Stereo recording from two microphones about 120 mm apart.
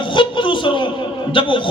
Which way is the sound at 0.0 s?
40° left (ahead or behind).